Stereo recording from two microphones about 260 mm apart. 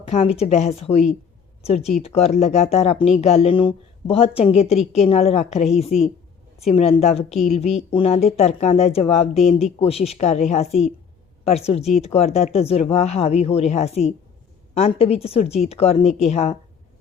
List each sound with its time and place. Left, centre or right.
0.1 s speech: left
9.5 s speech: centre
9.7 s speech: left